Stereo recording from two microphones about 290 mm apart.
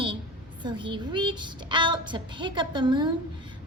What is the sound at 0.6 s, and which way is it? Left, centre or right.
Speech, centre.